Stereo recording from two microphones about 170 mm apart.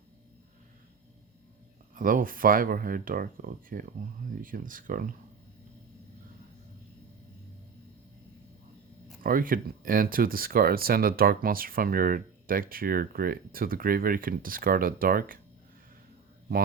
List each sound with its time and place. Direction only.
2.0 s speech: 55° right (ahead or behind)
9.2 s speech: 55° right (ahead or behind)